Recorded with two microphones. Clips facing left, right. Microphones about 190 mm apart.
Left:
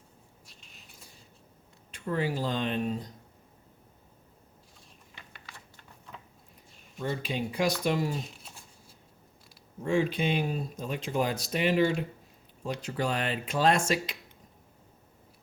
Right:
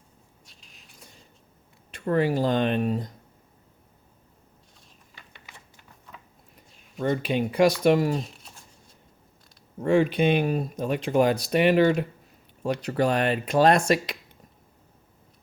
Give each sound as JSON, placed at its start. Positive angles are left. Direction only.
{"t": 0.4, "sound": "a sound", "side_deg": 0}
{"t": 1.9, "sound": "speech", "side_deg": -60}
{"t": 5.3, "sound": "typing", "side_deg": -20}
{"t": 7.0, "sound": "speech", "side_deg": -65}
{"t": 8.2, "sound": "a sound", "side_deg": 0}
{"t": 9.8, "sound": "speech", "side_deg": -65}